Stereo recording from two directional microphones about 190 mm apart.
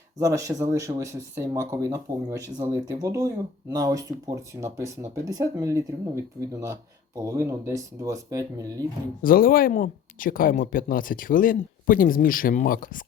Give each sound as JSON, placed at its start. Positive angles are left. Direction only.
{"t": 0.2, "sound": "speech", "side_deg": -15}
{"t": 9.2, "sound": "speech", "side_deg": 50}